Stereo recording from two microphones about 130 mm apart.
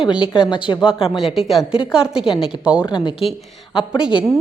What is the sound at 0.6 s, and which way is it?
Speech, 40° left (ahead or behind).